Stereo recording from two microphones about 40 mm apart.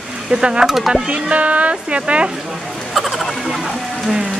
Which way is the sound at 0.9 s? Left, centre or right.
Right.